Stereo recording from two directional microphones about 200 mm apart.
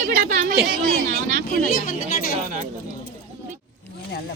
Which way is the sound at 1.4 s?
45° left (ahead or behind).